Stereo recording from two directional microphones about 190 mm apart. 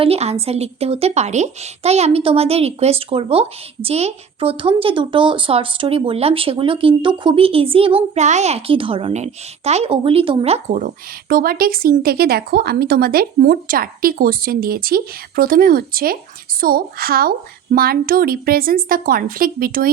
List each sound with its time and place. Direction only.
0.0 s a woman's voice: 35° right (ahead or behind); by 19.9 s 50° right (ahead or behind)